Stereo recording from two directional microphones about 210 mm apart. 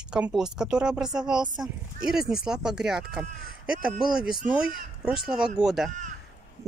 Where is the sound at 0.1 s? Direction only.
5° right (ahead or behind).